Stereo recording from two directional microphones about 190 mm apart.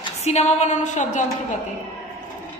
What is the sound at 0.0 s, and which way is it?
A woman's voice, 35° left (ahead or behind).